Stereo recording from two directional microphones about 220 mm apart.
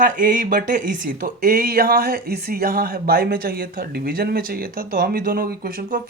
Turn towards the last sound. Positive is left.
turn(degrees=-40)  # may be behind; listen again after turning